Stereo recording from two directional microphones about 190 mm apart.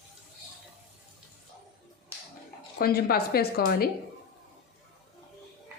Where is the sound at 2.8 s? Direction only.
55° left (ahead or behind).